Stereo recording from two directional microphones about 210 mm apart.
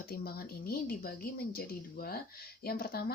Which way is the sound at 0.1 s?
45° left (ahead or behind).